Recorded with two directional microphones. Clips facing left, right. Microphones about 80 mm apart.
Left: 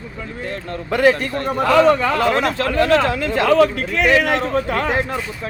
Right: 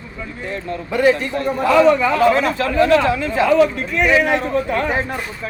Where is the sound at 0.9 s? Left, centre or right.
Left.